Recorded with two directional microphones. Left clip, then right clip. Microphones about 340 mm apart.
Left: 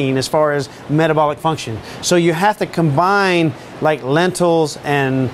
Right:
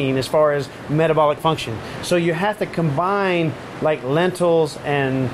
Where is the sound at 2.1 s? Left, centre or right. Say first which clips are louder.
Left 5 dB; left.